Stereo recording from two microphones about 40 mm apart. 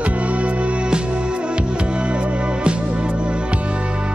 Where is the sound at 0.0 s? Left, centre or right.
Right.